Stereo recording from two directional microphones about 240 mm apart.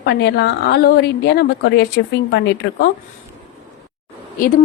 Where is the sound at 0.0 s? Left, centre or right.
Left.